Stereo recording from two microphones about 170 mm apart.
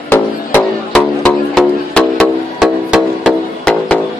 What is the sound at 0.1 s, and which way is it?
Music, 10° left (ahead or behind).